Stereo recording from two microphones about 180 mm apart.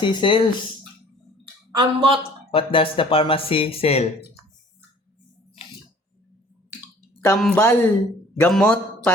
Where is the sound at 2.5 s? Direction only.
30° left (ahead or behind).